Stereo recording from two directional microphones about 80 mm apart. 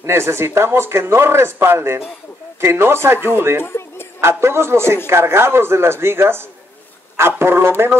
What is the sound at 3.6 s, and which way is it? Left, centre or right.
Music, left.